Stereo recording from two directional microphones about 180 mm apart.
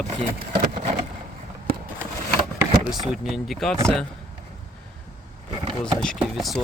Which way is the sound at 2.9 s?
Centre (ahead or behind).